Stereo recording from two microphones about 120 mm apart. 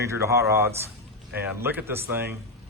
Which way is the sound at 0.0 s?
25° right (ahead or behind).